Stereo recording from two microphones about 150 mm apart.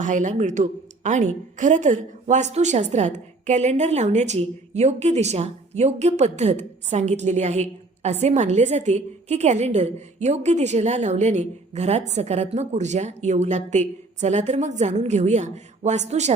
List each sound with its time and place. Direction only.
0.0 s a woman's voice: 55° right (ahead or behind)